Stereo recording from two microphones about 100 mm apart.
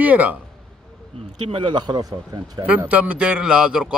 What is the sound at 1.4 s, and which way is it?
Speech, 55° right (ahead or behind).